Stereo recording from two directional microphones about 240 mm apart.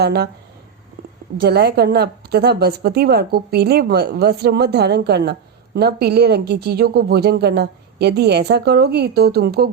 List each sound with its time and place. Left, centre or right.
0.0 s speech: right
1.4 s a woman's voice: right